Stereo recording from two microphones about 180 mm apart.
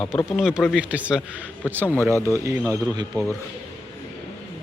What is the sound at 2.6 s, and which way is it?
Speech, 10° left (ahead or behind).